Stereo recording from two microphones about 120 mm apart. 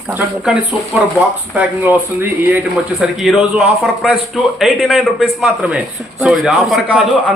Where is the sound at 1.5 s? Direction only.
10° right (ahead or behind).